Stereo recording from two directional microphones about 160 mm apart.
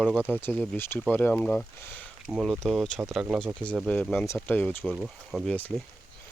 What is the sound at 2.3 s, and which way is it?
Speech, 5° right (ahead or behind).